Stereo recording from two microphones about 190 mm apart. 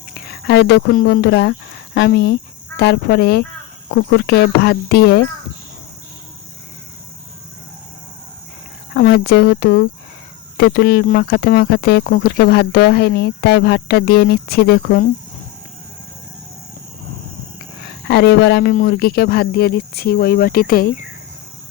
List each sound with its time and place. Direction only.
0.3 s speech: 60° left (ahead or behind)
9.0 s speech: 55° left (ahead or behind)
18.1 s speech: 60° left (ahead or behind)
18.7 s speech: 50° left (ahead or behind)